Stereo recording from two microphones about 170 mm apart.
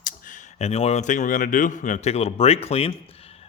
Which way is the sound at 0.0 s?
55° left (ahead or behind).